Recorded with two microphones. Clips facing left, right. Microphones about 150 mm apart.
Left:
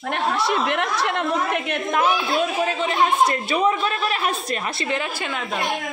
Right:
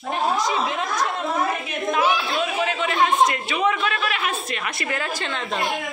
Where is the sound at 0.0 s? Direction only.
70° left (ahead or behind); by 5.1 s 20° left (ahead or behind).